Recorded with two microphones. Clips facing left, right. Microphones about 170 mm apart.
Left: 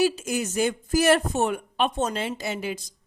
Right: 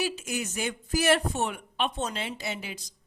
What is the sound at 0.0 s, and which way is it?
Speech, 40° left (ahead or behind).